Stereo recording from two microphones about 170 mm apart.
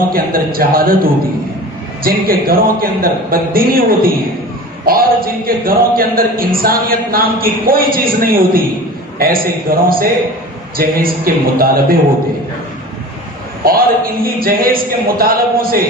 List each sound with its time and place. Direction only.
0.1 s speech: 60° right (ahead or behind)
2.0 s speech: 60° right (ahead or behind)
13.7 s speech: 60° right (ahead or behind)